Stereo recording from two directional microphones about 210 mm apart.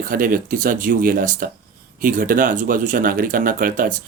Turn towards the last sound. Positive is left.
turn(degrees=-40)  # may be behind; listen again after turning